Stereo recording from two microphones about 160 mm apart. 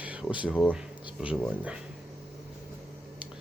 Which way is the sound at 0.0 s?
10° right (ahead or behind).